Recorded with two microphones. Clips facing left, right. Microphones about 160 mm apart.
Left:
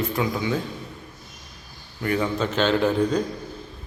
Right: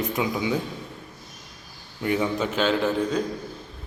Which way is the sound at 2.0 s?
20° right (ahead or behind).